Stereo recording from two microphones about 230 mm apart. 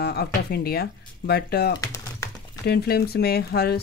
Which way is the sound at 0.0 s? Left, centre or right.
Left.